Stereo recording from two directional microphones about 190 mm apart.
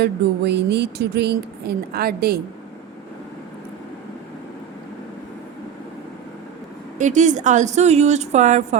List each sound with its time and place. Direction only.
0.0 s speech: 60° right (ahead or behind)
7.0 s speech: 40° right (ahead or behind)